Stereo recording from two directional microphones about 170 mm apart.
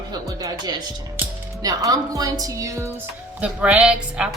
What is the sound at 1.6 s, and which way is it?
A woman's voice, 20° right (ahead or behind).